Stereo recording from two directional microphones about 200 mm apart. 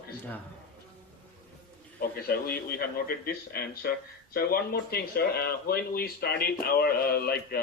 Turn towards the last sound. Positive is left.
turn(degrees=50)  # may be behind; listen again after turning